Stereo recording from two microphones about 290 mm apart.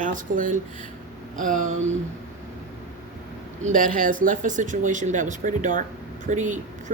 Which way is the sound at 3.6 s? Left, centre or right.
Right.